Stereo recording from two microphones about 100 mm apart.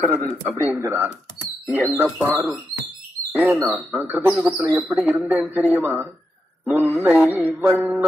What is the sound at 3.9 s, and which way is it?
Music, 20° right (ahead or behind).